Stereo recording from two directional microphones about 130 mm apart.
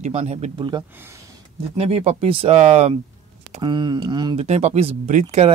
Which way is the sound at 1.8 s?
50° right (ahead or behind).